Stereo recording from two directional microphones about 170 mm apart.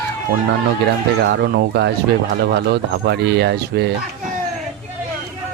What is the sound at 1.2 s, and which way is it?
Speech, 80° right.